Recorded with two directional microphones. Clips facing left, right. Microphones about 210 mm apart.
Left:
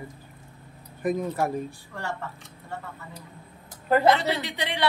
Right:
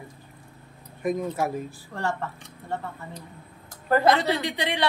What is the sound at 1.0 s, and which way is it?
Speech, centre (ahead or behind).